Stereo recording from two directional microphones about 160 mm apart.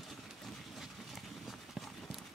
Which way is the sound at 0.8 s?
Centre (ahead or behind).